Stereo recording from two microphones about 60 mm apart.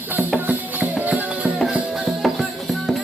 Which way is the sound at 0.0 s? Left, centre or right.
Right.